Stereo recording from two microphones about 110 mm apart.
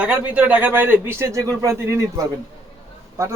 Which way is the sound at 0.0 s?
10° right (ahead or behind).